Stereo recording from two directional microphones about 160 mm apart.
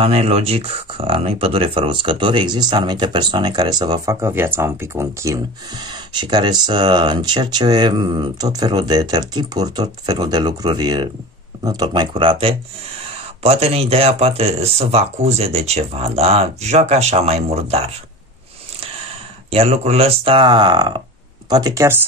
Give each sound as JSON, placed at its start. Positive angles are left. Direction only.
{"t": 0.0, "sound": "speech", "side_deg": -40}
{"t": 19.5, "sound": "speech", "side_deg": -40}